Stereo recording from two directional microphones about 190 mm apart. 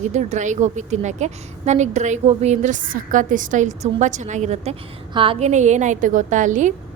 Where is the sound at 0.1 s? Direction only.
40° right (ahead or behind).